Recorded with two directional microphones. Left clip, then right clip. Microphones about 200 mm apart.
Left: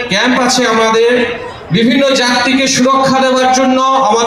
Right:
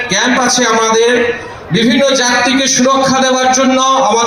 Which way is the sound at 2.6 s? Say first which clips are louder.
Even; 20° right (ahead or behind).